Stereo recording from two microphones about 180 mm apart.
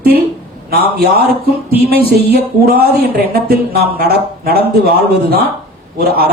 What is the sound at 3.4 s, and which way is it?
A man's voice, 55° right (ahead or behind).